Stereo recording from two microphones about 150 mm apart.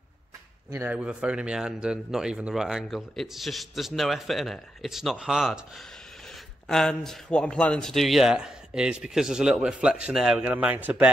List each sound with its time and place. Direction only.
0.7 s speech: 15° right (ahead or behind)
0.9 s speech: 5° right (ahead or behind)